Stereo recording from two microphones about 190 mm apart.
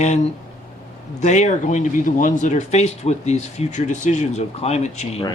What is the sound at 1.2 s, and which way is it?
Speech, 40° left (ahead or behind).